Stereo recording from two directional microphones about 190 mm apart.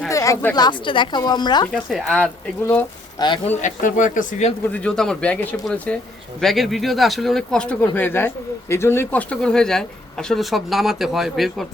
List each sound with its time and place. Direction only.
0.1 s speech: 15° left (ahead or behind)
1.7 s speech: centre (ahead or behind)
3.2 s speech: 25° left (ahead or behind); by 4.5 s 40° left (ahead or behind)
4.6 s speech: 5° left (ahead or behind)